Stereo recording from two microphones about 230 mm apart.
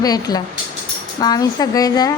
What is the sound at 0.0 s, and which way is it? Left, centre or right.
A woman's voice, centre.